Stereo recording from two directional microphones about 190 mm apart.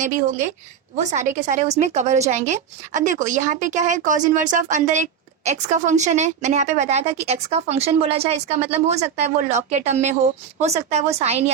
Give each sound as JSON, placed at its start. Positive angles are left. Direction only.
{"t": 0.0, "sound": "a woman's voice", "side_deg": -40}